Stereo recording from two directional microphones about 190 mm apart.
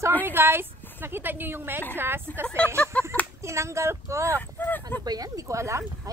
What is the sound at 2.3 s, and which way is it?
Speech, 10° left (ahead or behind).